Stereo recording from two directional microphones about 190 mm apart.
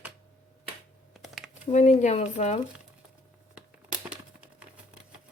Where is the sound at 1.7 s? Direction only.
35° left (ahead or behind).